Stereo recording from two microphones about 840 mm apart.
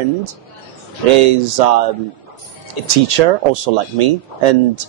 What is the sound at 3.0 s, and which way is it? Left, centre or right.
Speech, right.